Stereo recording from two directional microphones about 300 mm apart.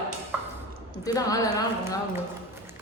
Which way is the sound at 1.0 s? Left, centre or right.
Centre.